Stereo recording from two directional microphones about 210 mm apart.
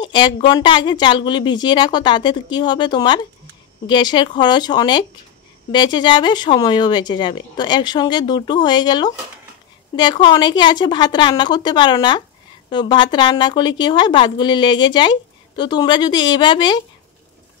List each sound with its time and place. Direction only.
0.0 s a woman's voice: 20° left (ahead or behind)